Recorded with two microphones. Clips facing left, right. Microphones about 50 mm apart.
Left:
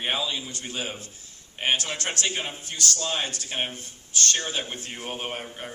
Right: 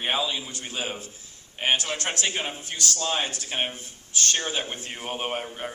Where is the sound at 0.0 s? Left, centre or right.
Centre.